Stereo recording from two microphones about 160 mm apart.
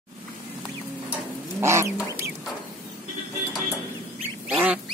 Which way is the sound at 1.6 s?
15° right (ahead or behind).